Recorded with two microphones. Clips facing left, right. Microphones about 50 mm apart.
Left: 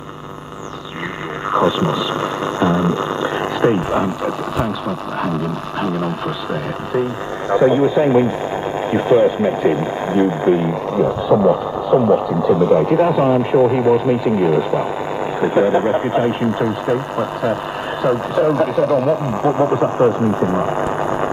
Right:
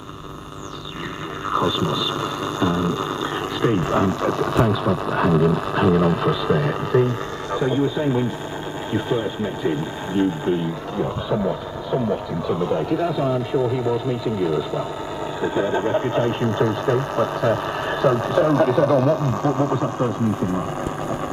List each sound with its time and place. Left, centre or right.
1.5 s a sound: left
3.9 s speech: centre
7.5 s speech: left
12.1 s speech: left
13.0 s speech: left
15.4 s speech: left; by 19.1 s centre
19.2 s speech: left